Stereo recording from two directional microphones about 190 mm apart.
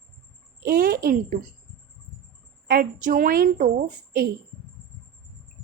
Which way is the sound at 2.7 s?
50° right (ahead or behind).